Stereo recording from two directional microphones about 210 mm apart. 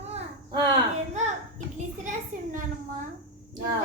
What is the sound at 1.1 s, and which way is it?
Speech, 30° right (ahead or behind).